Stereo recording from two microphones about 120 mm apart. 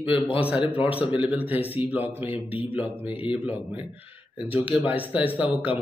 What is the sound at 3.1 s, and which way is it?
Speech, 50° left (ahead or behind).